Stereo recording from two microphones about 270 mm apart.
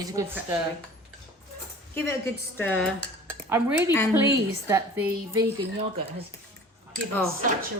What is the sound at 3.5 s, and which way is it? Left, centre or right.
A woman's voice, centre.